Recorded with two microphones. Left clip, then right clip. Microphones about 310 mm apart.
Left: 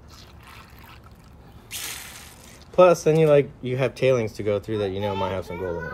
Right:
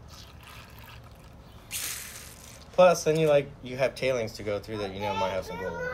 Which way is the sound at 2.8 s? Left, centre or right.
Left.